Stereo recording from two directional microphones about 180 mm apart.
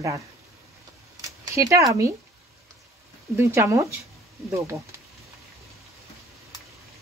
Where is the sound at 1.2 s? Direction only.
15° right (ahead or behind).